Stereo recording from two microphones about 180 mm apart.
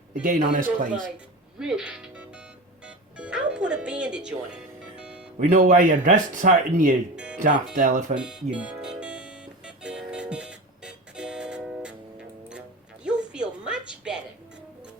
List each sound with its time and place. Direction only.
0.1 s speech: 45° right (ahead or behind)
1.5 s speech: 5° right (ahead or behind)
2.8 s music: 5° right (ahead or behind)
5.4 s speech: 45° right (ahead or behind)
8.1 s music: 5° right (ahead or behind)
13.1 s a sound: 5° right (ahead or behind)